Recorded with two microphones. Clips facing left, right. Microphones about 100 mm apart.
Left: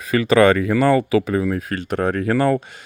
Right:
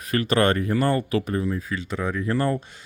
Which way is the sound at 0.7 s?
90° left.